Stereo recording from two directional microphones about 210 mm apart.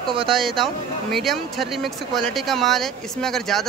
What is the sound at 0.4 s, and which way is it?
Speech, centre (ahead or behind).